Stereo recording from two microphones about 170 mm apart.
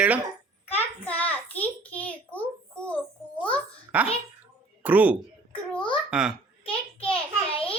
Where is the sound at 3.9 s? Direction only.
10° right (ahead or behind).